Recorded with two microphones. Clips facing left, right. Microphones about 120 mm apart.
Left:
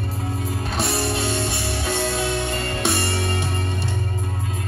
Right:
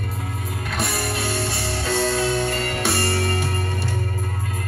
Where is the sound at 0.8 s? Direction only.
30° left (ahead or behind).